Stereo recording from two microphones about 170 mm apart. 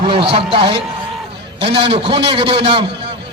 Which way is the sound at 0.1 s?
30° right (ahead or behind).